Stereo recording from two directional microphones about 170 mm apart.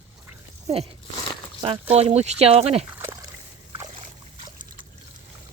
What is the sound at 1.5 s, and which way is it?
Speech, 30° right (ahead or behind).